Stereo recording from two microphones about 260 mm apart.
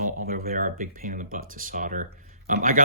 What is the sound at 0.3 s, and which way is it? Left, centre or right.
Speech, right.